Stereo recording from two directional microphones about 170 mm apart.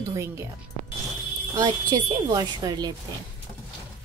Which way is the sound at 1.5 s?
25° right (ahead or behind).